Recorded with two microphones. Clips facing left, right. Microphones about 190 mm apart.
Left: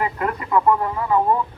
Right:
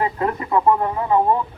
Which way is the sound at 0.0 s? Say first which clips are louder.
Right 2 dB; 25° right (ahead or behind).